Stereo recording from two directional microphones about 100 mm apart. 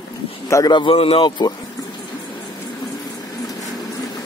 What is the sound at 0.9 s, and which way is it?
Speech, 75° left (ahead or behind).